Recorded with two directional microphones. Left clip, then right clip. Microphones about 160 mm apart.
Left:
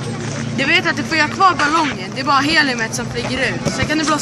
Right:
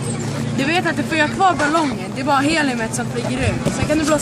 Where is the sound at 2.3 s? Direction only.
60° right (ahead or behind).